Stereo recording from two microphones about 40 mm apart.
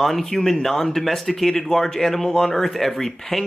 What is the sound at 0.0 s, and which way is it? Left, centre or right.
Speech, centre.